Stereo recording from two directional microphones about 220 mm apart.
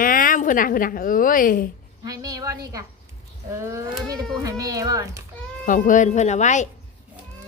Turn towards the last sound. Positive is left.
turn(degrees=35)  # may be behind; listen again after turning